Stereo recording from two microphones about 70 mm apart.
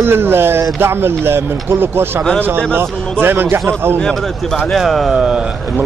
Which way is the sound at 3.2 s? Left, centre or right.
Right.